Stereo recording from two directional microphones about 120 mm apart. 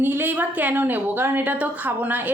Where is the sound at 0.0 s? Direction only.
15° right (ahead or behind).